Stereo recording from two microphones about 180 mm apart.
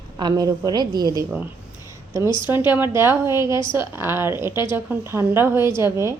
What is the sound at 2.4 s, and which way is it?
A woman's voice, 10° right (ahead or behind).